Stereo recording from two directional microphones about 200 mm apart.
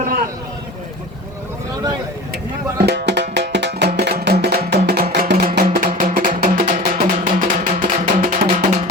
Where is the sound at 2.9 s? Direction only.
60° right (ahead or behind).